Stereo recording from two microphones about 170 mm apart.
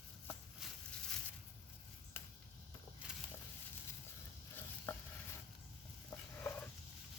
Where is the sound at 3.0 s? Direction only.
5° right (ahead or behind).